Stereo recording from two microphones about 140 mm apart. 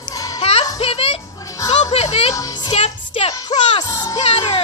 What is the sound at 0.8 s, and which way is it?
Music, 45° left (ahead or behind).